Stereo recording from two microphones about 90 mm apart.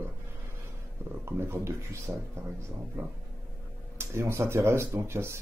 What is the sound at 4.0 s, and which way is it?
Speech, 30° right (ahead or behind).